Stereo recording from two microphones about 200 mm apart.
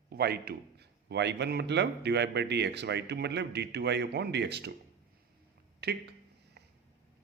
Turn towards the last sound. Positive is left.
turn(degrees=-55)  # may be behind; listen again after turning